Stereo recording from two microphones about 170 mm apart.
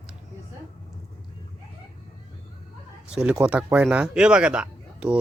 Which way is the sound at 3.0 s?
5° right (ahead or behind).